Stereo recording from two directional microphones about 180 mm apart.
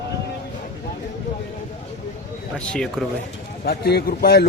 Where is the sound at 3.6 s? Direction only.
60° left (ahead or behind).